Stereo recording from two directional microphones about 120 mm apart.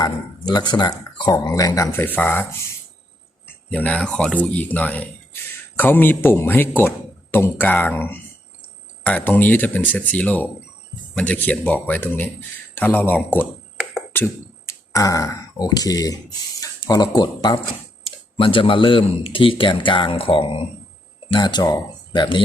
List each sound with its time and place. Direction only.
0.0 s speech: 35° left (ahead or behind)
1.5 s speech: 25° left (ahead or behind)
14.1 s beatboxing: 20° left (ahead or behind)
14.7 s speech: 30° left (ahead or behind)
16.6 s a sound: 30° left (ahead or behind)
17.2 s speech: 35° left (ahead or behind)
18.0 s speech: 50° left (ahead or behind)